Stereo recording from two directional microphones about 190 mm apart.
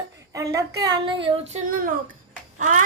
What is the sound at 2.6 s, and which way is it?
Babbling, 40° right (ahead or behind).